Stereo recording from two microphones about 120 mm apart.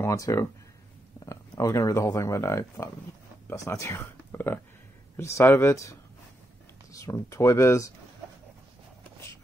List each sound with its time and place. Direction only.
0.0 s speech: 25° left (ahead or behind)